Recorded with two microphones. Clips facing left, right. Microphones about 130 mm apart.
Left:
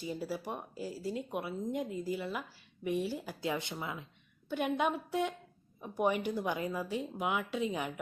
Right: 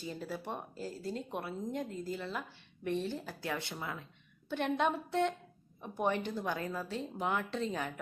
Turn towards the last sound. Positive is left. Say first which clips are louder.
# left 2 dB
turn(degrees=10)  # may be behind; listen again after turning